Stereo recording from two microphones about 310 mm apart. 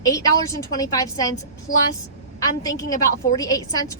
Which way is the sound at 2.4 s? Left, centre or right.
Centre.